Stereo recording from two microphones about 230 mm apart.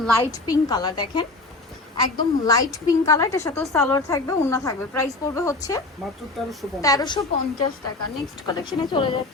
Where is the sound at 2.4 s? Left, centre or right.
Centre.